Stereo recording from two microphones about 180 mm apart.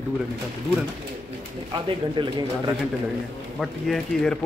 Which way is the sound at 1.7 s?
25° right (ahead or behind).